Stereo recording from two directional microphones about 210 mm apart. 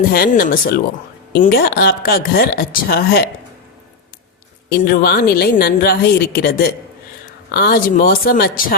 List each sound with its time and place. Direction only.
0.1 s a woman's voice: 45° left (ahead or behind)
4.7 s a woman's voice: 45° left (ahead or behind)